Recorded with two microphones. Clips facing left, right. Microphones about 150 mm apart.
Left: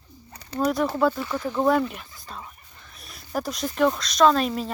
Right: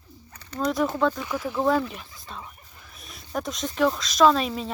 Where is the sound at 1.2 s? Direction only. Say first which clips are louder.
Left 2 dB; 5° right (ahead or behind).